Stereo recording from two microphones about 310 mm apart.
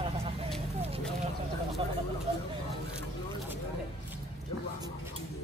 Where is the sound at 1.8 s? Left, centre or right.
Centre.